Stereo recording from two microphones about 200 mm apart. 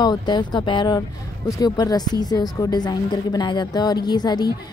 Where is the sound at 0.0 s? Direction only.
20° left (ahead or behind).